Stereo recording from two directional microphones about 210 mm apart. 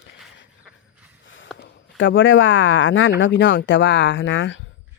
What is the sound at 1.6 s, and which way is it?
Speech, 65° left (ahead or behind).